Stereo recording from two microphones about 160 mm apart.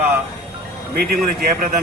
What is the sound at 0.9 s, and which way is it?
Speech, 70° right (ahead or behind).